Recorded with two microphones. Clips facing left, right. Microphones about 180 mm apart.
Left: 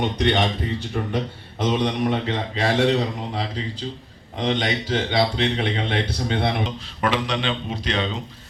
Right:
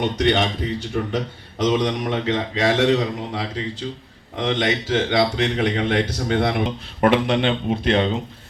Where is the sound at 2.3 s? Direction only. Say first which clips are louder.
Right 3 dB; 90° right.